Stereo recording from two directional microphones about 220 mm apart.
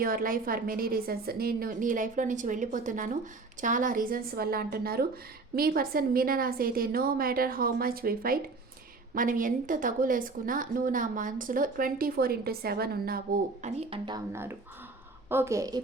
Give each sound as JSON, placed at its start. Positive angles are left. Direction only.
{"t": 0.0, "sound": "a woman's voice", "side_deg": -40}